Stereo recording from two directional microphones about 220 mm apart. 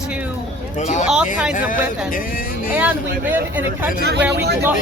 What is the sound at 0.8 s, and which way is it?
Speech, 35° left (ahead or behind).